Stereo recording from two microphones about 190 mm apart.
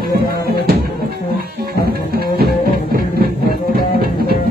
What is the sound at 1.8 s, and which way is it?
Music, 55° right (ahead or behind).